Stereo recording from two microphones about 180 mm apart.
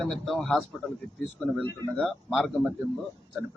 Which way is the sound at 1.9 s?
Centre (ahead or behind).